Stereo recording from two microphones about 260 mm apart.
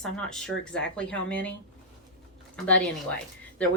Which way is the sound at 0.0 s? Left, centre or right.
Centre.